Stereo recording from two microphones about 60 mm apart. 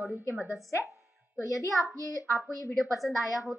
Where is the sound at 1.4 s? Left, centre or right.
Left.